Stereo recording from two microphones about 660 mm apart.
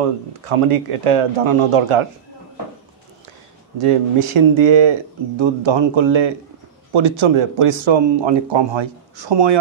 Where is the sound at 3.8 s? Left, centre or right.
Right.